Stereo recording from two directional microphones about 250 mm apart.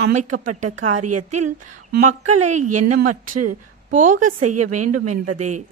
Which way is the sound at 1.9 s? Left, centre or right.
Right.